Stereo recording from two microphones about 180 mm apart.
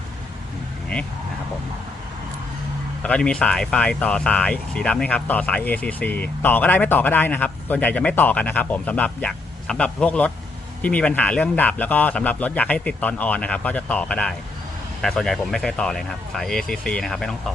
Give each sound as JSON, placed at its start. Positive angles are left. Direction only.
{"t": 3.0, "sound": "speech", "side_deg": 5}